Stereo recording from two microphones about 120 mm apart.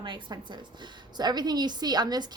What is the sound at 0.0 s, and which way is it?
A woman's voice, 40° right (ahead or behind).